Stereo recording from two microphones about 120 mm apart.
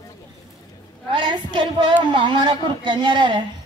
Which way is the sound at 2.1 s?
40° right (ahead or behind).